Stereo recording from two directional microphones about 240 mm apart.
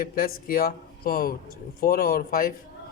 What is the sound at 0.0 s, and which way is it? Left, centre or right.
Speech, left.